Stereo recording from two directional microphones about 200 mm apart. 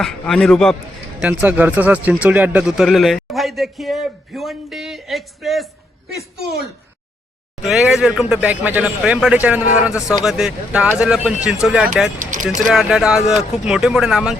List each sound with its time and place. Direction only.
0.0 s speech: 5° left (ahead or behind)
1.2 s speech: 5° right (ahead or behind)
7.6 s speech: 5° right (ahead or behind)
12.2 s speech: 40° right (ahead or behind)
12.5 s speech: centre (ahead or behind)